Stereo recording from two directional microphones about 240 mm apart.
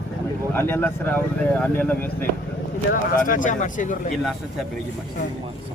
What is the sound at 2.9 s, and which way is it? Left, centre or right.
Speech, left.